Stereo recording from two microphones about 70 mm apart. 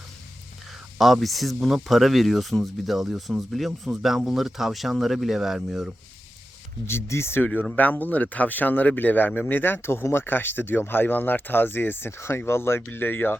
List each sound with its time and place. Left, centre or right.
0.9 s speech: centre
6.8 s speech: left
7.6 s speech: left